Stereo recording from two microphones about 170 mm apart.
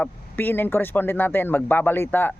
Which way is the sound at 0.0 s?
10° left (ahead or behind).